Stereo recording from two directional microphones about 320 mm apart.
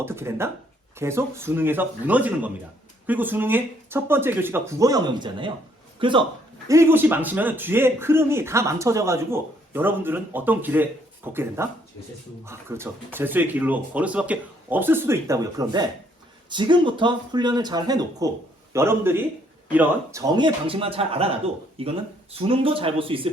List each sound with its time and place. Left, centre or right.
0.0 s a man's voice: centre